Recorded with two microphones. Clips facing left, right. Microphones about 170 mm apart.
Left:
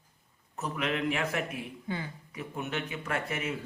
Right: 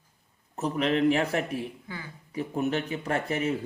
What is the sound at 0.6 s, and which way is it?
Speech, 35° right (ahead or behind).